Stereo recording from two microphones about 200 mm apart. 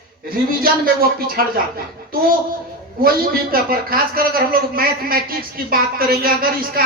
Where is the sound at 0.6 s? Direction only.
45° right (ahead or behind).